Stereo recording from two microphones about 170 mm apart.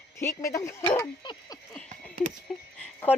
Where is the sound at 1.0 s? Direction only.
20° left (ahead or behind).